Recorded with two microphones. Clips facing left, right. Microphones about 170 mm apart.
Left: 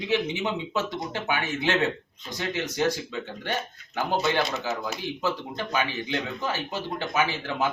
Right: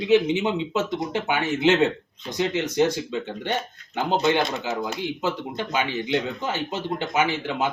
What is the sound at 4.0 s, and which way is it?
Speech, 20° right (ahead or behind).